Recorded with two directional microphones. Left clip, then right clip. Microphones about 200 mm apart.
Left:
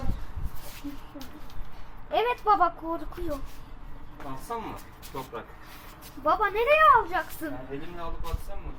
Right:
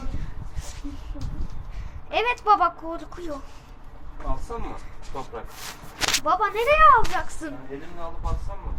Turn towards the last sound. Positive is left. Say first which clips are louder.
# right 1 dB
turn(degrees=-10)  # may be behind; listen again after turning